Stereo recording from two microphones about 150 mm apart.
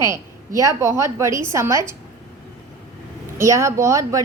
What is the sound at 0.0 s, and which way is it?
A woman's voice, 20° right (ahead or behind).